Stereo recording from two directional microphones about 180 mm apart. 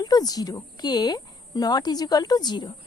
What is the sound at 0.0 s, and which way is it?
A woman's voice, 20° left (ahead or behind).